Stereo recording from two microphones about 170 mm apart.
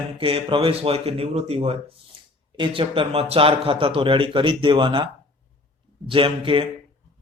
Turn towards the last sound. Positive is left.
turn(degrees=-30)  # may be behind; listen again after turning